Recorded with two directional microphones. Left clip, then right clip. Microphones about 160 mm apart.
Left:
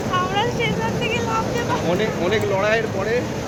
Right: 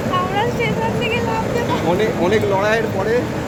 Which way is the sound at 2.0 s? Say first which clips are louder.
Right 4 dB; 45° right (ahead or behind).